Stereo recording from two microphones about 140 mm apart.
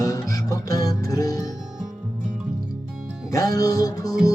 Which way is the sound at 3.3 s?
25° left (ahead or behind).